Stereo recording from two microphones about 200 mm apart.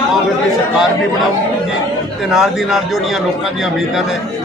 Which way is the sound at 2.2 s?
Centre (ahead or behind).